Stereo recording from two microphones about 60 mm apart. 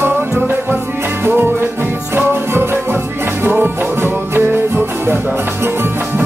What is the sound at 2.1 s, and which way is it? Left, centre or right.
Music, right.